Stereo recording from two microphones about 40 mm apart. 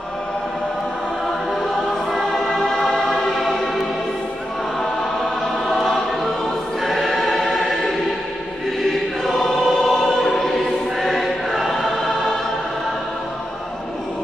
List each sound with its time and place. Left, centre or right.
1.5 s choir: centre
5.7 s choir: centre